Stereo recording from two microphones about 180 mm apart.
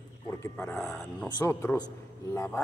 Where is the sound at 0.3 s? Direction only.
10° left (ahead or behind).